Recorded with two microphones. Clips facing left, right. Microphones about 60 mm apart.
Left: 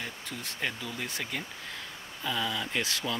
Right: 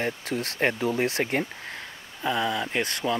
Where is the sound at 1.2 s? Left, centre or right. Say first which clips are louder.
Right 9 dB; right.